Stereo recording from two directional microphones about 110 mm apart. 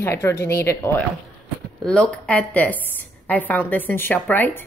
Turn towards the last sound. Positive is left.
turn(degrees=15)  # may be behind; listen again after turning